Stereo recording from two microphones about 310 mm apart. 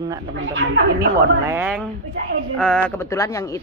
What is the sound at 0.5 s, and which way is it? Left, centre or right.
Speech, right.